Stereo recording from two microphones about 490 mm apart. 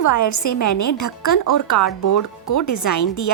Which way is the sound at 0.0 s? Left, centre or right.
Left.